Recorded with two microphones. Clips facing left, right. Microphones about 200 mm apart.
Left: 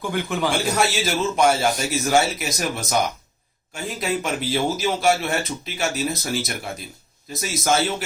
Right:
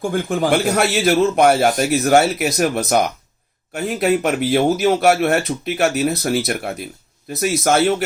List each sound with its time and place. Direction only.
0.0 s speech: 45° right (ahead or behind)